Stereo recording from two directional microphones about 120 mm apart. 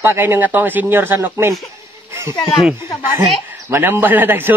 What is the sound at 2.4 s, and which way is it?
Speech, centre (ahead or behind).